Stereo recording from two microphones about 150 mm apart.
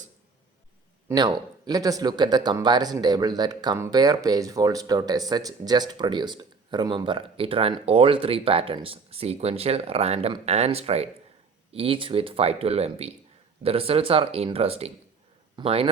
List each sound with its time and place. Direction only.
1.0 s speech: 25° right (ahead or behind)